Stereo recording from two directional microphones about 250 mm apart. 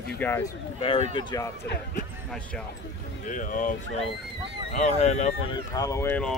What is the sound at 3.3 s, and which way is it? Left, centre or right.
Speech, left.